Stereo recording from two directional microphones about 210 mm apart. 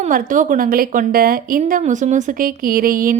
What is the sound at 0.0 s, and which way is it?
A woman's voice, 40° right (ahead or behind).